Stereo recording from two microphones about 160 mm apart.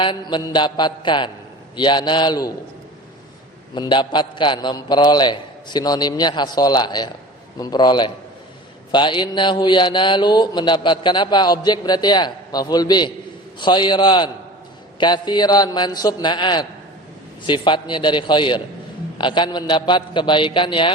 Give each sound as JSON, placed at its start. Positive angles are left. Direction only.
{"t": 0.0, "sound": "speech", "side_deg": 30}
{"t": 3.8, "sound": "speech", "side_deg": 30}